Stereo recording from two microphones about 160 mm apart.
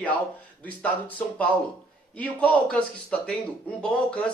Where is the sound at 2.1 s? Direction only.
10° left (ahead or behind).